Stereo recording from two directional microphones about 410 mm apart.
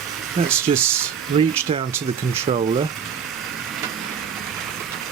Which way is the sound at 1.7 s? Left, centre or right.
Centre.